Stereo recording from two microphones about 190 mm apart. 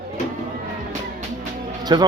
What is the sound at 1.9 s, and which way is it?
Speech, 20° right (ahead or behind).